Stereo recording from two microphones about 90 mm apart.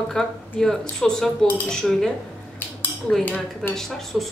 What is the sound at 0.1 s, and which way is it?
Speech, 5° left (ahead or behind).